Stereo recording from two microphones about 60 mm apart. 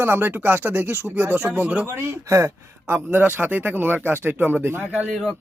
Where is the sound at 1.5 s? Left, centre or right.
Right.